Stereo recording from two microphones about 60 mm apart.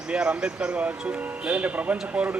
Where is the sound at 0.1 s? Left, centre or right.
Centre.